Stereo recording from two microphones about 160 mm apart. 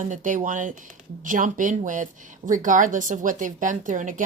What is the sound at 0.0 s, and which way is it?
A woman's voice, 55° right (ahead or behind).